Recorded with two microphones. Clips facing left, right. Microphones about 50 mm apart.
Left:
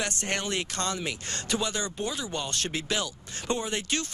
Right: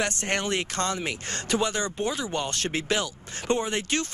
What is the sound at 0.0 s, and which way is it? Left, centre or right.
Speech, right.